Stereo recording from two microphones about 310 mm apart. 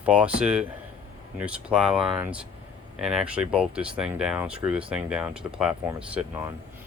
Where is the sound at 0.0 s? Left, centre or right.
Centre.